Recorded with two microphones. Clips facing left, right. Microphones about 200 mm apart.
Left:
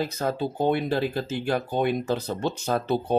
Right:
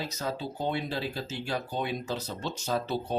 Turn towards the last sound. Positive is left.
turn(degrees=55)  # may be behind; listen again after turning